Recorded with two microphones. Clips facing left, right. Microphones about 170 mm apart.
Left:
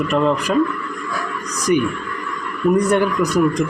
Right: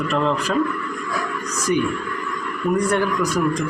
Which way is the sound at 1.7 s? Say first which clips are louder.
Left 3 dB; 20° left (ahead or behind).